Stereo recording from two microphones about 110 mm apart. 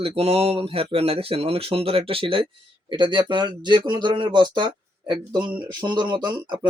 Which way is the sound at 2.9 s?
45° right (ahead or behind).